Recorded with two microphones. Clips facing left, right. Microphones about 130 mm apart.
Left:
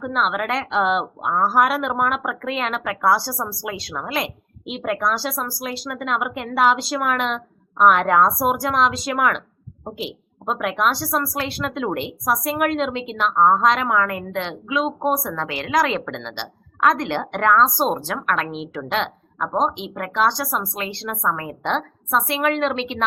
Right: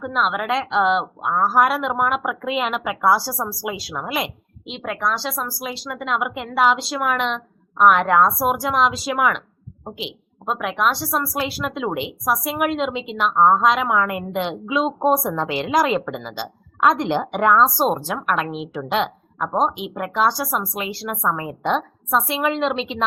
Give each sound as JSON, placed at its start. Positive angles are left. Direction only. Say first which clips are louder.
{"t": 0.0, "sound": "speech", "louder": "even", "side_deg": 0}
{"t": 4.6, "sound": "speech", "louder": "left 2 dB", "side_deg": 5}
{"t": 10.4, "sound": "speech", "louder": "even", "side_deg": 0}
{"t": 16.8, "sound": "a woman's voice", "louder": "right 1 dB", "side_deg": -20}
{"t": 22.4, "sound": "a woman's voice", "louder": "left 2 dB", "side_deg": -25}